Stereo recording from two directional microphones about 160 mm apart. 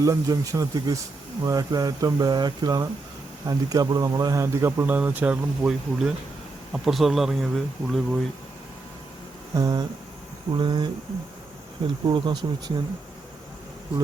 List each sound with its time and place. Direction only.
0.0 s speech: 20° right (ahead or behind); by 8.2 s centre (ahead or behind)
9.6 s speech: 25° right (ahead or behind)
12.0 s speech: 30° right (ahead or behind)